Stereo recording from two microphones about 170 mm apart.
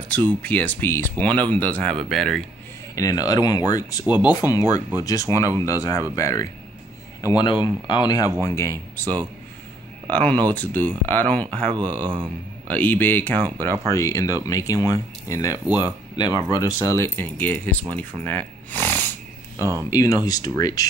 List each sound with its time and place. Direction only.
0.4 s speech: 10° left (ahead or behind)
3.0 s speech: 20° left (ahead or behind)
4.0 s speech: 10° right (ahead or behind)
4.3 s speech: 20° left (ahead or behind)
7.3 s speech: 30° left (ahead or behind); by 11.7 s 10° left (ahead or behind)
12.0 s a man's voice: 30° right (ahead or behind)
12.6 s speech: 10° left (ahead or behind)
19.6 s a man's voice: 20° right (ahead or behind)
19.9 s speech: 20° left (ahead or behind)